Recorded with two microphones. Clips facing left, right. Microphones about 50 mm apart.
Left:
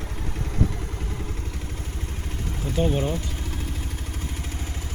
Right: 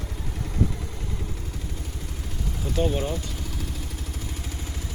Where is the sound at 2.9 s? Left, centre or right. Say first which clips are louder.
Left 2 dB; left.